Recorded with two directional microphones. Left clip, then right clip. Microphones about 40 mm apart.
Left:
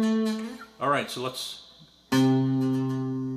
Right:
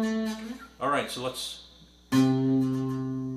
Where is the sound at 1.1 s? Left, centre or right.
Left.